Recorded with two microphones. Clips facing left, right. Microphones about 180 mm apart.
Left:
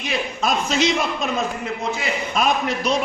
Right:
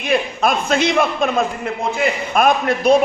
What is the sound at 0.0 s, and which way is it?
A man's voice, 55° right (ahead or behind).